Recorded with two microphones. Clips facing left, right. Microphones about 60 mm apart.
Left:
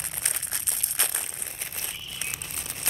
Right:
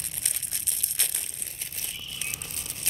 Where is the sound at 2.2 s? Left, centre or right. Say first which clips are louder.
Left 2 dB; left.